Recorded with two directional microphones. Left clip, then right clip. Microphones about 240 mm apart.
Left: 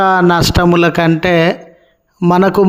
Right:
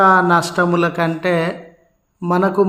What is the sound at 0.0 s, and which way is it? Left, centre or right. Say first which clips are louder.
A man's voice: left 2 dB; left.